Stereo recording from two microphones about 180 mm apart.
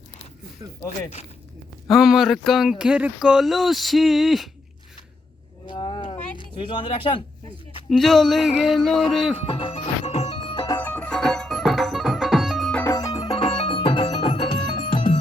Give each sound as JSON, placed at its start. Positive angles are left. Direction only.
{"t": 0.6, "sound": "speech", "side_deg": -15}
{"t": 1.9, "sound": "speech", "side_deg": 0}
{"t": 5.6, "sound": "a sound", "side_deg": 25}
{"t": 7.9, "sound": "speech", "side_deg": 0}
{"t": 9.5, "sound": "music", "side_deg": 30}
{"t": 10.8, "sound": "music", "side_deg": 10}
{"t": 12.9, "sound": "music", "side_deg": 20}